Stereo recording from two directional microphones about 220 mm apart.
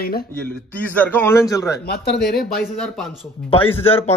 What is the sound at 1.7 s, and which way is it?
Speech, 45° left (ahead or behind).